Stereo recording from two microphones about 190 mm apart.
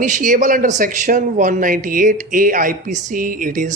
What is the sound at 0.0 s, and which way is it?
A man's voice, 45° right (ahead or behind).